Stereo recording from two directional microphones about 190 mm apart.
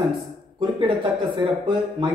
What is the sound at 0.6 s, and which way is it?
Speech, 25° right (ahead or behind).